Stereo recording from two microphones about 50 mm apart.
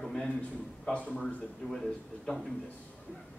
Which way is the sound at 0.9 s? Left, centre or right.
Left.